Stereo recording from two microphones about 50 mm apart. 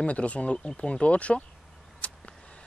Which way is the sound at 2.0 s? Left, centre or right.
Left.